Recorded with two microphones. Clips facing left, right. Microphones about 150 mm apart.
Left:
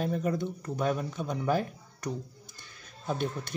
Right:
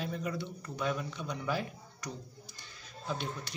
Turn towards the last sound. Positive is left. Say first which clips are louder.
# left 5 dB
turn(degrees=50)  # may be behind; listen again after turning